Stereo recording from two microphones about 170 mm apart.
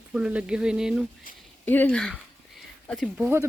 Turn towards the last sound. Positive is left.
turn(degrees=-15)  # may be behind; listen again after turning